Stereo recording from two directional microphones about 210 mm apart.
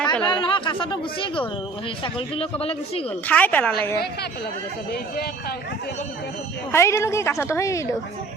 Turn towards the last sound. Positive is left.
turn(degrees=15)  # may be behind; listen again after turning